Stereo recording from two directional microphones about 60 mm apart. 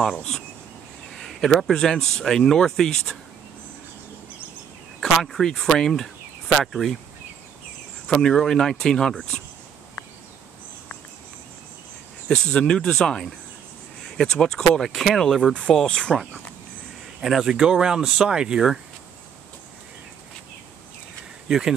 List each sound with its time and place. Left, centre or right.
0.1 s speech: centre
1.1 s speech: centre
5.2 s speech: centre
8.1 s speech: centre
12.3 s speech: centre
17.2 s speech: centre
21.5 s speech: centre